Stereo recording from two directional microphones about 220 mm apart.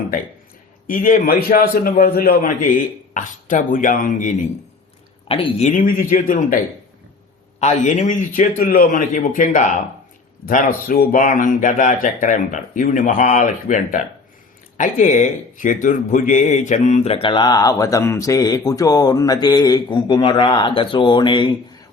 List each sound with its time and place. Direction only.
0.9 s speech: 40° left (ahead or behind)
7.6 s a man's voice: 35° left (ahead or behind)